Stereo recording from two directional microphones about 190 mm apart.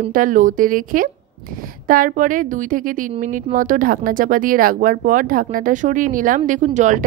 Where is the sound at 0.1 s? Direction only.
45° right (ahead or behind).